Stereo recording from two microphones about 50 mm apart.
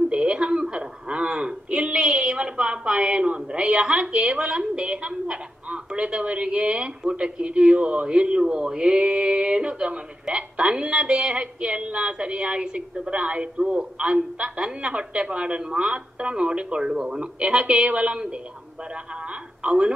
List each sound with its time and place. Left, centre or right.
0.1 s a woman's voice: right
19.6 s speech: right